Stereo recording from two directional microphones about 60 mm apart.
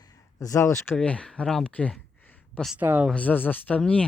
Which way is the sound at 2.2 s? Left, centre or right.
Left.